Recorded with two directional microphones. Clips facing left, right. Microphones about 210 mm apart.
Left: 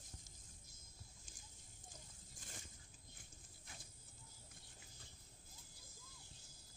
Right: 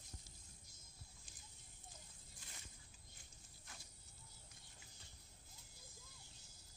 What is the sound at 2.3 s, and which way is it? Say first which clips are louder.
Biting: left 6 dB; 45° left (ahead or behind).